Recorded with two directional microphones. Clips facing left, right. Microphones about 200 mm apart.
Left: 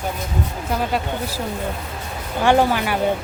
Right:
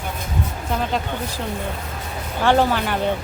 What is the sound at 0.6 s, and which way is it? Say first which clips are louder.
Speech: left 1 dB; 5° left (ahead or behind).